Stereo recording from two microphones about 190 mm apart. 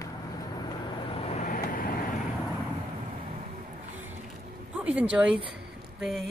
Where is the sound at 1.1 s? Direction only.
30° left (ahead or behind).